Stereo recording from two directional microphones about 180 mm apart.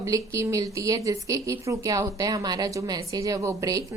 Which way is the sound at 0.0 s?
15° right (ahead or behind).